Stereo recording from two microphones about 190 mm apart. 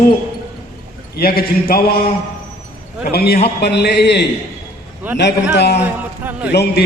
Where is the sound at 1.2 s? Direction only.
50° left (ahead or behind).